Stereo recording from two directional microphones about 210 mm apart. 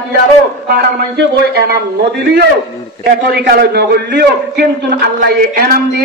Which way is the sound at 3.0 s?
50° right (ahead or behind).